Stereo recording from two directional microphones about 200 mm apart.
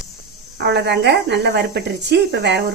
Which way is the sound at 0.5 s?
60° right (ahead or behind).